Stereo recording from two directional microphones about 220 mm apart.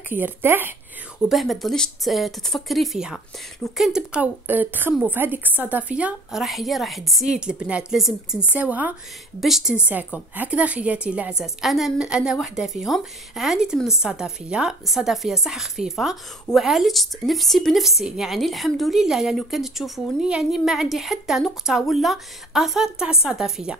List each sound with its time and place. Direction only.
0.1 s a woman's voice: 10° right (ahead or behind)